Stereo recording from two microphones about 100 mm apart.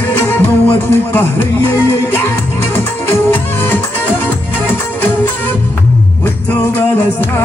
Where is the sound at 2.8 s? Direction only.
25° left (ahead or behind).